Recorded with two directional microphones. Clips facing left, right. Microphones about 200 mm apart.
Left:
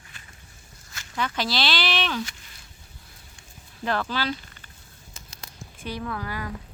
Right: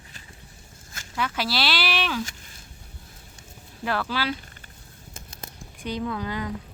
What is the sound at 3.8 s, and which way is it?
Speech, 5° right (ahead or behind).